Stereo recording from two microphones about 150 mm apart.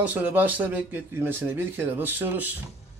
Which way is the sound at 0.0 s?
10° right (ahead or behind).